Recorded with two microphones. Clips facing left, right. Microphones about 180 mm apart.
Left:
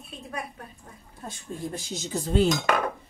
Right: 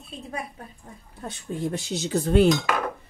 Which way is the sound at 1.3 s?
70° right (ahead or behind).